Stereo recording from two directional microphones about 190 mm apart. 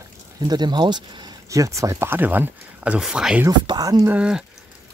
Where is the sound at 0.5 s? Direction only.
20° right (ahead or behind); by 3.4 s 5° right (ahead or behind).